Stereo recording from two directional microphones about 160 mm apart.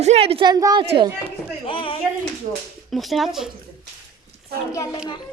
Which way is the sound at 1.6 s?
35° left (ahead or behind).